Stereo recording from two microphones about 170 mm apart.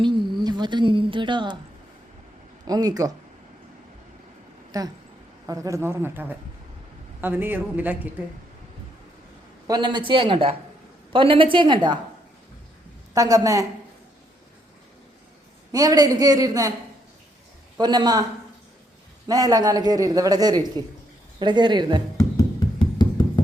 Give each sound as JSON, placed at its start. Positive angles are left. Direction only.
{"t": 0.0, "sound": "a woman's voice", "side_deg": -25}
{"t": 2.6, "sound": "a man's voice", "side_deg": -20}
{"t": 4.7, "sound": "a man's voice", "side_deg": -20}
{"t": 9.6, "sound": "a man's voice", "side_deg": -25}
{"t": 13.1, "sound": "a man's voice", "side_deg": -20}
{"t": 15.7, "sound": "a man's voice", "side_deg": -20}
{"t": 17.7, "sound": "a man's voice", "side_deg": -25}
{"t": 19.3, "sound": "a man's voice", "side_deg": -20}
{"t": 22.8, "sound": "a sound", "side_deg": 25}